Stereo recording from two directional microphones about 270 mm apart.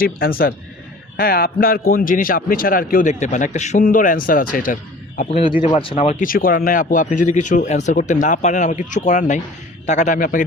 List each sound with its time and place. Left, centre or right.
0.0 s a man's voice: left